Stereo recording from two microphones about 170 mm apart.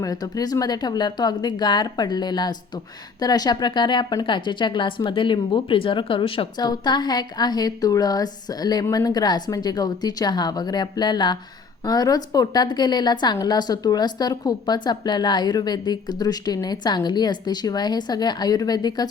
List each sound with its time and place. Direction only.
0.0 s speech: 20° left (ahead or behind)